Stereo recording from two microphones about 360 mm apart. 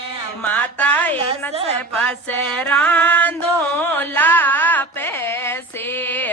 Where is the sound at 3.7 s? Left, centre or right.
Centre.